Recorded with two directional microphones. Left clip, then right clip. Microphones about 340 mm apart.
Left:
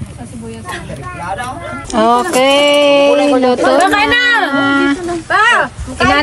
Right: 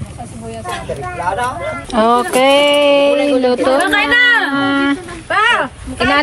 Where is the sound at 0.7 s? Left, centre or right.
Centre.